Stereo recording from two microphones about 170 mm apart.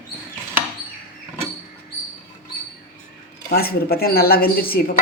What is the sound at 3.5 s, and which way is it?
Speech, 60° left (ahead or behind).